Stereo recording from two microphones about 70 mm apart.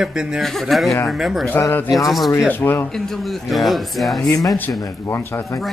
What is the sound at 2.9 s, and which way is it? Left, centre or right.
Speech, centre.